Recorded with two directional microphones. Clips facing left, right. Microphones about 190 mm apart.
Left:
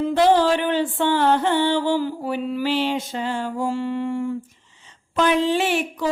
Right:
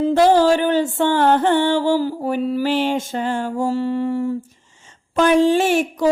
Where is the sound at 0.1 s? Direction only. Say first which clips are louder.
Right 3 dB; 45° right (ahead or behind).